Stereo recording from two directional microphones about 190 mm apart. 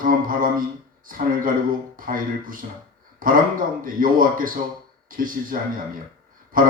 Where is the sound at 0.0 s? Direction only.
45° right (ahead or behind).